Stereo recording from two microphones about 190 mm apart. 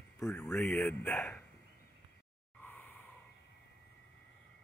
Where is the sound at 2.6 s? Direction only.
10° left (ahead or behind).